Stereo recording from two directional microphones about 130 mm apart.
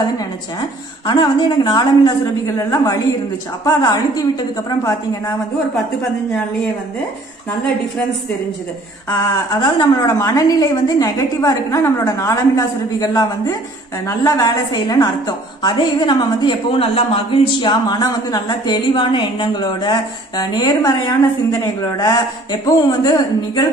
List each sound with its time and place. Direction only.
0.6 s a woman's voice: 35° left (ahead or behind)
9.5 s a woman's voice: 30° left (ahead or behind)
10.0 s a woman's voice: 20° left (ahead or behind)